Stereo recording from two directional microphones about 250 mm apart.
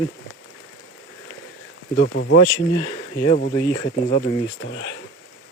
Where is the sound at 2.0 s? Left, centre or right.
Left.